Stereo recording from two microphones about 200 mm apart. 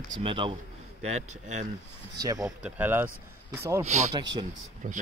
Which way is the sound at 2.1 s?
15° right (ahead or behind).